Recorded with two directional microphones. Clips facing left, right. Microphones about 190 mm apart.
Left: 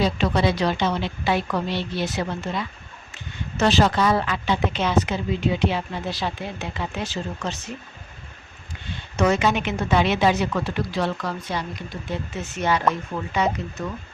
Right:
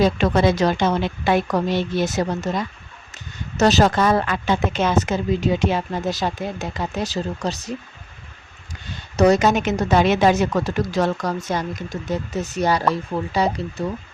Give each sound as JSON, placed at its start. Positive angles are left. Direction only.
{"t": 0.0, "sound": "speech", "side_deg": -45}
{"t": 8.9, "sound": "a woman's voice", "side_deg": -40}